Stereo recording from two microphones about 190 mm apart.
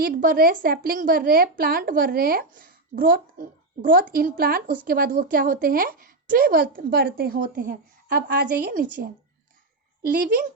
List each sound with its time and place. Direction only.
0.0 s a woman's voice: 50° right (ahead or behind)